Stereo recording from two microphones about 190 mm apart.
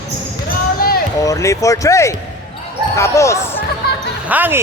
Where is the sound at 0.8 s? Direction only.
50° left (ahead or behind).